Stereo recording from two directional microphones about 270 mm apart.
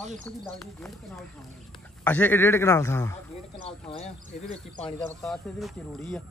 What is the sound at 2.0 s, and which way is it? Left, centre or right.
A man's voice, centre.